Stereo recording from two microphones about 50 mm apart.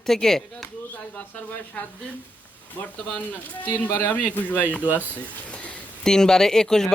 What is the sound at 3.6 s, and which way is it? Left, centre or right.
Speech, left.